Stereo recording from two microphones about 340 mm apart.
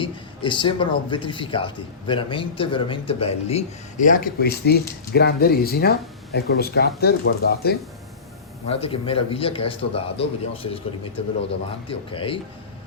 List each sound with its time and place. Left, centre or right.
0.0 s a man's voice: centre
8.7 s a man's voice: centre
11.9 s a man's voice: centre